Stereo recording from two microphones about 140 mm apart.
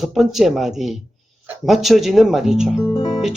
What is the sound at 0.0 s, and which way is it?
Speech, centre (ahead or behind).